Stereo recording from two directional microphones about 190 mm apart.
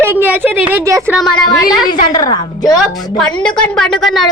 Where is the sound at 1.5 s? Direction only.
20° left (ahead or behind).